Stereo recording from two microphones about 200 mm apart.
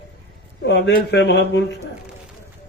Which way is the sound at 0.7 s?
60° left (ahead or behind).